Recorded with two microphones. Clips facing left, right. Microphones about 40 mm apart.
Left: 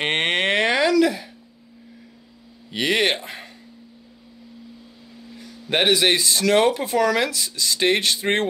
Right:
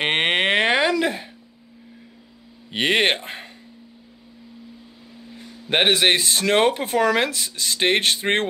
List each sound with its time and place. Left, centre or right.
0.0 s a sound: centre; by 1.3 s right
2.7 s speech: right
5.3 s speech: right